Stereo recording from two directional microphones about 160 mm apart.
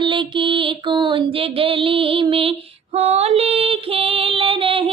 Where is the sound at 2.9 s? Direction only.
45° right (ahead or behind).